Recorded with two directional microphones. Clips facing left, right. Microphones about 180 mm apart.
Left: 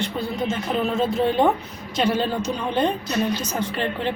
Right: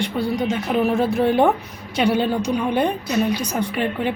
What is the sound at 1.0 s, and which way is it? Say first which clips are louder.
Speech: right 2 dB; 20° left (ahead or behind).